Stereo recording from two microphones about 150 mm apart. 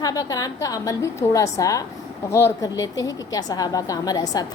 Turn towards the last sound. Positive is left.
turn(degrees=25)  # may be behind; listen again after turning